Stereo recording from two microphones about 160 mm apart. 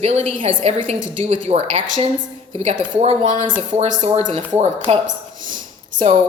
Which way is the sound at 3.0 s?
40° right (ahead or behind).